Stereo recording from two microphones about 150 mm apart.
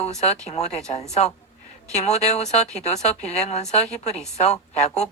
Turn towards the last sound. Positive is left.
turn(degrees=45)  # may be behind; listen again after turning